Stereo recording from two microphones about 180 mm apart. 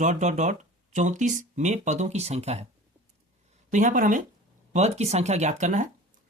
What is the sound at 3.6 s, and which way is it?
Speech, 45° right (ahead or behind).